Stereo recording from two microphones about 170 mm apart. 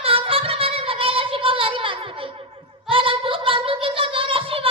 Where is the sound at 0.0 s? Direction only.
35° right (ahead or behind).